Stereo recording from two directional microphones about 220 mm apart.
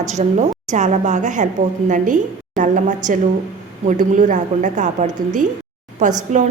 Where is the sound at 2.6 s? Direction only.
35° right (ahead or behind).